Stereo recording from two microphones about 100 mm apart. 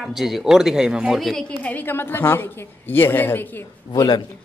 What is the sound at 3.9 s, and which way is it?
Speech, 45° left (ahead or behind).